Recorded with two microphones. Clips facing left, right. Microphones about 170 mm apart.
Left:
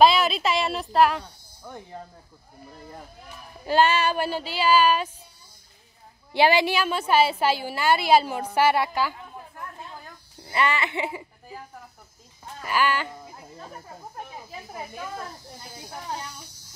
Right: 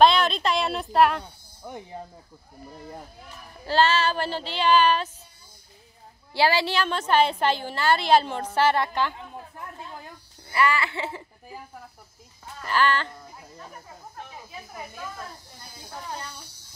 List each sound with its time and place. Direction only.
0.0 s speech: 5° left (ahead or behind)
1.6 s speech: 15° right (ahead or behind)
3.6 s a woman's voice: 15° left (ahead or behind)
6.3 s a woman's voice: 20° left (ahead or behind)
10.4 s music: 25° left (ahead or behind)
12.6 s a woman's voice: 10° left (ahead or behind)